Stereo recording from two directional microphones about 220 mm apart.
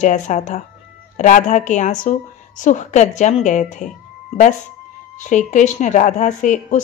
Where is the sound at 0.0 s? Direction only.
35° left (ahead or behind).